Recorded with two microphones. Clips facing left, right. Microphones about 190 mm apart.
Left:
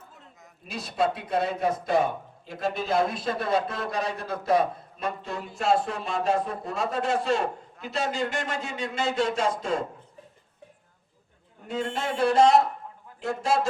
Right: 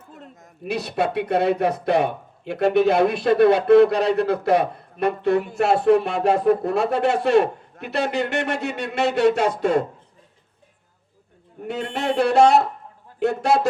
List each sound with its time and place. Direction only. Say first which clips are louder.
0.2 s speech: right 11 dB; 65° right (ahead or behind)
11.6 s speech: right 4 dB; 65° right (ahead or behind)